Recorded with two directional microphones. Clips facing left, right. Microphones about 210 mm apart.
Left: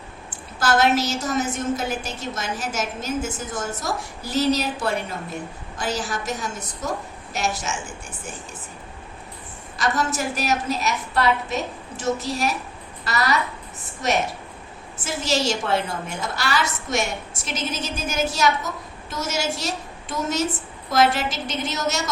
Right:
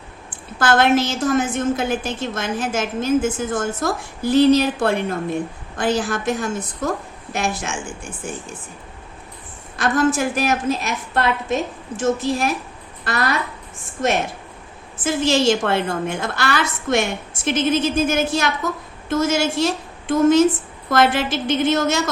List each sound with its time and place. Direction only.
0.3 s a woman's voice: 55° right (ahead or behind)
9.7 s a woman's voice: 55° right (ahead or behind)
14.9 s a woman's voice: 55° right (ahead or behind)